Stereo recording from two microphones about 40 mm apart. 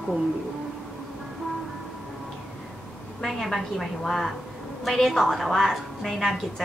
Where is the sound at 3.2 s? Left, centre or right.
Centre.